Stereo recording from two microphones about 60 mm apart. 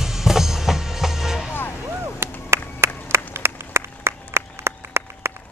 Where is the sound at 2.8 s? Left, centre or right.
Right.